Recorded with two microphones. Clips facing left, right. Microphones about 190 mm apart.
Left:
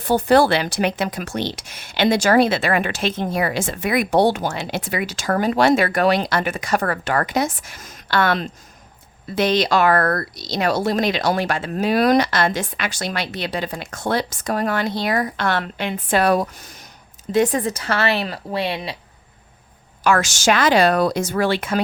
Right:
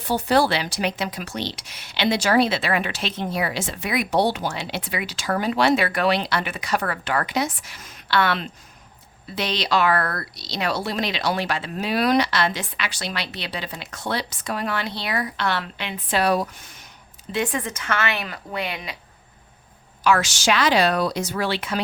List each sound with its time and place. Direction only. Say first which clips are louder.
0.0 s a woman's voice: left 5 dB; 50° left (ahead or behind); by 18.9 s 30° left (ahead or behind)
20.1 s speech: left 2 dB; 50° left (ahead or behind)